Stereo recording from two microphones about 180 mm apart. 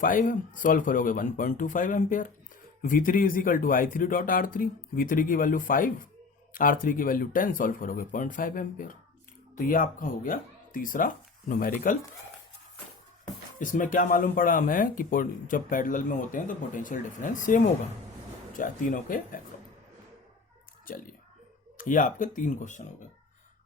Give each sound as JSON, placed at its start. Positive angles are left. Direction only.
{"t": 0.0, "sound": "speech", "side_deg": 50}
{"t": 13.6, "sound": "speech", "side_deg": 45}
{"t": 21.8, "sound": "speech", "side_deg": 45}